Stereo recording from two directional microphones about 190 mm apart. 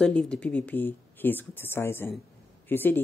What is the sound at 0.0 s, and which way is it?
Speech, 5° left (ahead or behind).